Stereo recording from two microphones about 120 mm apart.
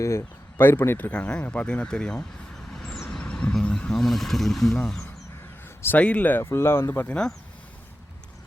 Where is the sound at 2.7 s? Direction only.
5° left (ahead or behind).